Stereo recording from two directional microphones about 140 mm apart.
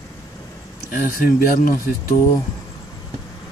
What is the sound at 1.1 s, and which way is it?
Speech, 85° left.